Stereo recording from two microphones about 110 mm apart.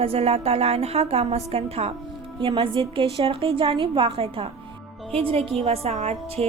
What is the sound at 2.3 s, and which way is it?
A woman's voice, 50° right (ahead or behind).